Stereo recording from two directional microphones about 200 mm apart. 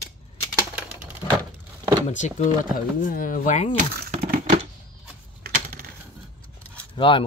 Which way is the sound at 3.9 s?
50° right (ahead or behind).